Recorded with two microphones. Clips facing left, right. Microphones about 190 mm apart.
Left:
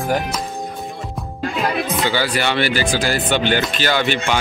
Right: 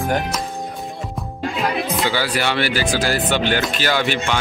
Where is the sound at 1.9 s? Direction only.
5° right (ahead or behind).